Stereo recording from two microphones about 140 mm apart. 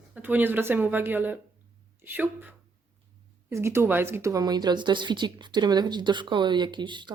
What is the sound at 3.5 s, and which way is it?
Speech, 20° right (ahead or behind).